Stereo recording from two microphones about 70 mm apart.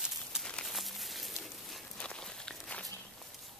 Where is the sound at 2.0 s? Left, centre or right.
Centre.